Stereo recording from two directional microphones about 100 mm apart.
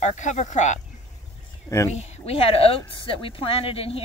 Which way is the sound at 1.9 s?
80° left.